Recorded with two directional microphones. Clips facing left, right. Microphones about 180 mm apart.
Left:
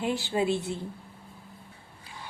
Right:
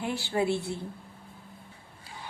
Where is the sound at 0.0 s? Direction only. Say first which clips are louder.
Left 1 dB; 20° left (ahead or behind).